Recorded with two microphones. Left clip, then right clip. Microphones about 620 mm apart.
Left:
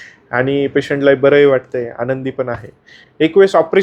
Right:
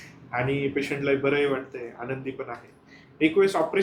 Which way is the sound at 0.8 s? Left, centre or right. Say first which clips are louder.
Left 16 dB; left.